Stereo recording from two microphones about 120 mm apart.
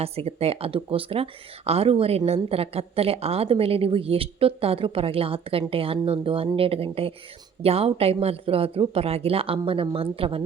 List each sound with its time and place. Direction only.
0.0 s speech: 55° right (ahead or behind)